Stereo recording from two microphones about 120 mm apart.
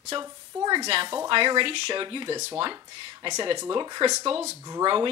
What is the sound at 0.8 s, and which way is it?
Speech, 50° right (ahead or behind).